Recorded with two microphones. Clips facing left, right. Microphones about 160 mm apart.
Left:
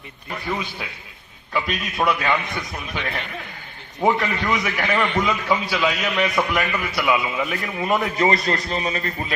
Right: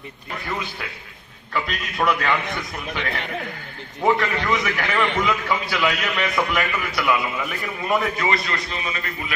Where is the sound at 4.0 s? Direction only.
10° left (ahead or behind).